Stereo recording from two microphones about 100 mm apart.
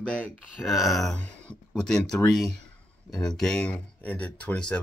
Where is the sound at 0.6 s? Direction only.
Centre (ahead or behind).